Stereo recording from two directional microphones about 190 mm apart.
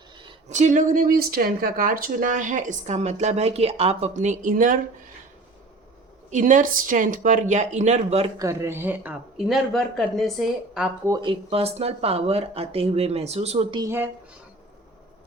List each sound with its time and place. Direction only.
0.2 s speech: 30° right (ahead or behind)
6.3 s speech: 40° right (ahead or behind)
8.4 s speech: 15° right (ahead or behind)
11.0 s speech: 20° right (ahead or behind)
13.8 s speech: 10° right (ahead or behind)